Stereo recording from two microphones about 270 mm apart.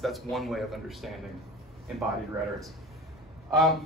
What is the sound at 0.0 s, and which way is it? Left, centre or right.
A man's voice, centre.